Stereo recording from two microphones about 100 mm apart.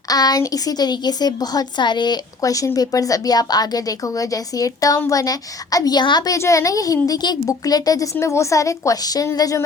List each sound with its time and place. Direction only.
0.1 s a woman's voice: 40° left (ahead or behind)
6.3 s a woman's voice: 30° left (ahead or behind)